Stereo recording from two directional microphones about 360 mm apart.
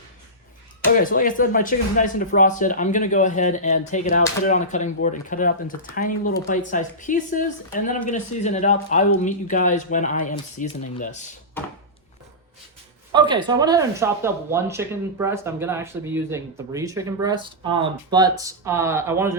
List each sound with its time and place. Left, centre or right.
0.9 s speech: left
13.1 s speech: centre